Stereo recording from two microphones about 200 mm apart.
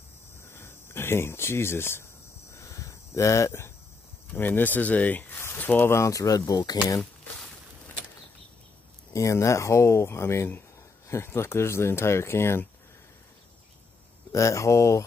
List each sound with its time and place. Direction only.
0.4 s speech: 10° left (ahead or behind)
2.5 s a sound: 15° left (ahead or behind)
4.3 s speech: 10° left (ahead or behind)
6.9 s a sound: 5° left (ahead or behind)
9.1 s speech: 15° left (ahead or behind)
14.3 s speech: 15° left (ahead or behind)